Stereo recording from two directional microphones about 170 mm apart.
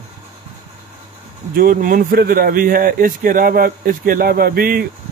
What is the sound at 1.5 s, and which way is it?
Speech, 60° right (ahead or behind).